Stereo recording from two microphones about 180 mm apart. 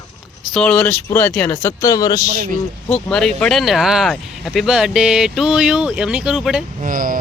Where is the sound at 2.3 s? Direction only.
45° right (ahead or behind).